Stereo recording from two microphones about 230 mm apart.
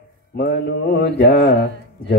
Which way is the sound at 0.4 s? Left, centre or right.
Left.